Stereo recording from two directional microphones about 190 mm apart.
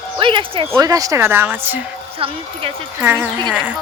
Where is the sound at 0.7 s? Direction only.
15° right (ahead or behind).